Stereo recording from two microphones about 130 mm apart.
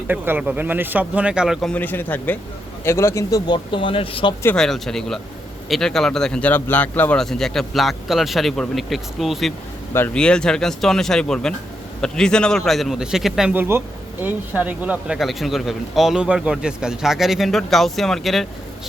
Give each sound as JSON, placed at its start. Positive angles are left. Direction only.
{"t": 0.1, "sound": "speech", "side_deg": -15}
{"t": 1.6, "sound": "speech", "side_deg": 10}
{"t": 4.5, "sound": "speech", "side_deg": 5}
{"t": 13.5, "sound": "speech", "side_deg": -15}